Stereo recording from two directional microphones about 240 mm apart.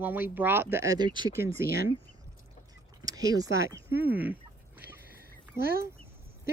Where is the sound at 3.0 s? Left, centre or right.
Centre.